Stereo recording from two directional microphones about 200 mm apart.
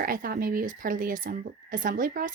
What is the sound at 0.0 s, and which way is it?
Speech, 45° right (ahead or behind).